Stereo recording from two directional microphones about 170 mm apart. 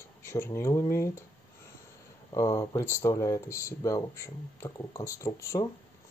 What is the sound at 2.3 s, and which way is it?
Speech, 20° left (ahead or behind).